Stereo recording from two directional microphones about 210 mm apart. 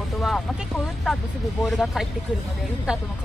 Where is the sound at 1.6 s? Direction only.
Centre (ahead or behind).